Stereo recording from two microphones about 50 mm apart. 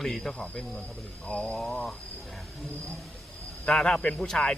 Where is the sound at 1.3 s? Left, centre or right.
Left.